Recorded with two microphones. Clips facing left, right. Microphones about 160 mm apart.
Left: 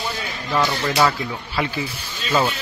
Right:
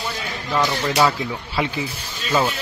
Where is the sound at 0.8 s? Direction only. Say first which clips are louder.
Right 1 dB; 10° right (ahead or behind).